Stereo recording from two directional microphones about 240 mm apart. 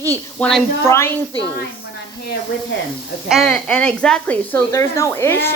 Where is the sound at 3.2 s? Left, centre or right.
Centre.